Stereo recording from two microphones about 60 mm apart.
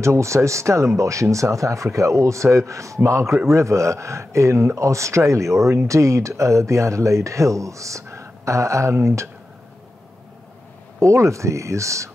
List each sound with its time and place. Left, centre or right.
0.0 s a man's voice: right
11.0 s speech: right